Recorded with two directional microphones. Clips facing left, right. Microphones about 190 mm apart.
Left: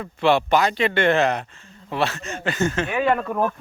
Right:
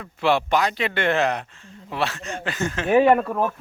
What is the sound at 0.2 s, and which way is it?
Speech, centre (ahead or behind).